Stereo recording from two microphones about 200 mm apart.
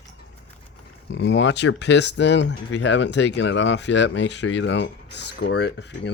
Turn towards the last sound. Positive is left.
turn(degrees=60)  # may be behind; listen again after turning